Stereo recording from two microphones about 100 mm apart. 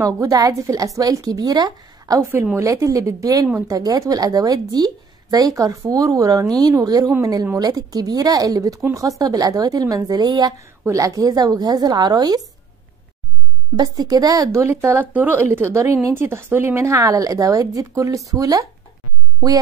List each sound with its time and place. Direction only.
0.0 s speech: 35° right (ahead or behind)
10.9 s speech: 35° right (ahead or behind)
13.7 s speech: 40° right (ahead or behind)